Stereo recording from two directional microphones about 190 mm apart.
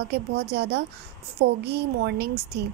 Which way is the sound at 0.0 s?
60° right (ahead or behind).